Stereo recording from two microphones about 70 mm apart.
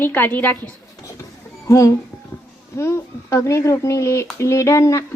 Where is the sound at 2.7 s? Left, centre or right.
Left.